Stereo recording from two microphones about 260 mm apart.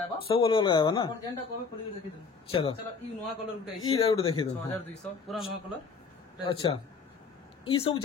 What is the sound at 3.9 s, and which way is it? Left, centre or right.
Speech, left.